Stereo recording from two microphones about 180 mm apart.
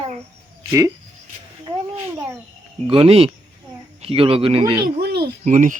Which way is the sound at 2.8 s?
30° right (ahead or behind).